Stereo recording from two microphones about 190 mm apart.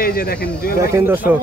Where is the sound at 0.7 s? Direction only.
15° right (ahead or behind).